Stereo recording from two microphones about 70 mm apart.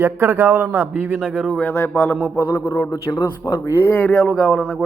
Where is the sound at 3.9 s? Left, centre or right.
Centre.